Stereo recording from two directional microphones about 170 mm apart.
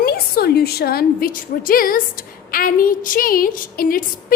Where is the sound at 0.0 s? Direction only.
65° left (ahead or behind).